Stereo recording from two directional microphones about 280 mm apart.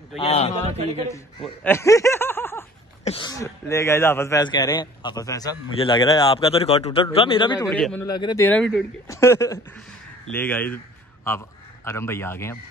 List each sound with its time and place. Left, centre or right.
0.2 s a man's voice: left
1.4 s speech: centre
3.0 s speech: centre
7.6 s a man's voice: centre